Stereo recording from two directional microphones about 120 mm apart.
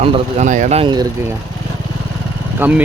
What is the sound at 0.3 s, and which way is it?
Speech, 90° right.